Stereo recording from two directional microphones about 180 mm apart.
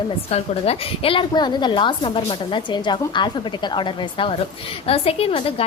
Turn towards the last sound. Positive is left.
turn(degrees=30)  # may be behind; listen again after turning